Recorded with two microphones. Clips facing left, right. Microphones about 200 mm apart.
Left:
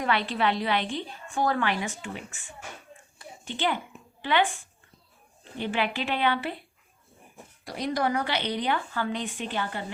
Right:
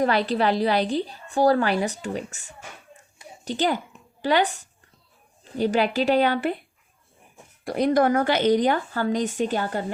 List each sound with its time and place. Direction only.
0.0 s a woman's voice: 40° right (ahead or behind)
7.6 s a woman's voice: 55° right (ahead or behind)